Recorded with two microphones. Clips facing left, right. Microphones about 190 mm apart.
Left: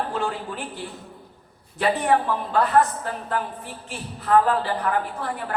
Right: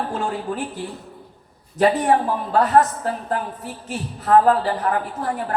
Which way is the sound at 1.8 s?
40° right (ahead or behind).